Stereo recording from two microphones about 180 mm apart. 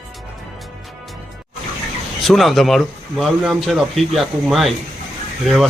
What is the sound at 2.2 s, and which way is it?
Speech, centre (ahead or behind).